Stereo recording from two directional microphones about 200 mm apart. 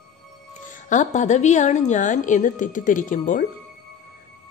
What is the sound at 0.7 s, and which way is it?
A woman's voice, 40° left (ahead or behind).